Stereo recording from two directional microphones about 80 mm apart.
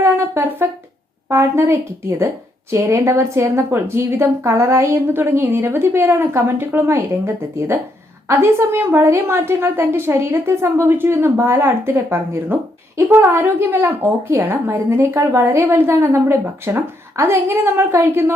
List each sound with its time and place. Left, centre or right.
0.0 s a woman's voice: right